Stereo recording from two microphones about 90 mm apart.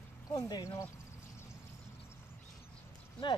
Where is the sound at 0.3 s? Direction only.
45° left (ahead or behind).